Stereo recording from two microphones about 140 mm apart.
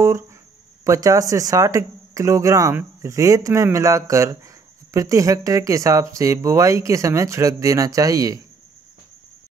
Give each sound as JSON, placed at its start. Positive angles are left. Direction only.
{"t": 0.8, "sound": "speech", "side_deg": -25}